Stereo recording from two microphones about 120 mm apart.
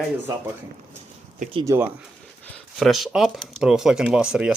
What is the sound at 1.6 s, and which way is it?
Speech, 25° right (ahead or behind).